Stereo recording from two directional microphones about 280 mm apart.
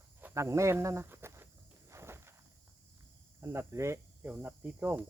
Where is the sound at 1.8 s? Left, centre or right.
Centre.